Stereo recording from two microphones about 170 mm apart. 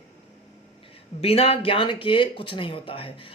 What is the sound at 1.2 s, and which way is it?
Speech, 35° left (ahead or behind).